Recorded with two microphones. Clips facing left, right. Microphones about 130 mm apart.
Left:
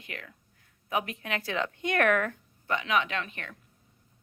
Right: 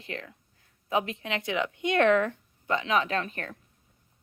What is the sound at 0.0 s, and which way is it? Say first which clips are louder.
A woman's voice: right 5 dB; 30° right (ahead or behind).